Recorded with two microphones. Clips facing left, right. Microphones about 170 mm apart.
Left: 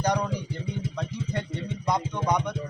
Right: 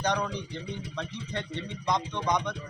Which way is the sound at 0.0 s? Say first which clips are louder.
Left 3 dB; 10° left (ahead or behind).